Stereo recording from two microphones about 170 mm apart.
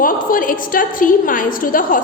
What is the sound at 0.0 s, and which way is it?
A woman's voice, 55° left (ahead or behind).